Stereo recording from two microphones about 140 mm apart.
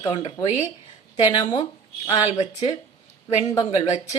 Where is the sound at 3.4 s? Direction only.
25° left (ahead or behind).